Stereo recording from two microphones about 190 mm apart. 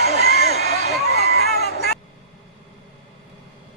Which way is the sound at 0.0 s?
55° left (ahead or behind).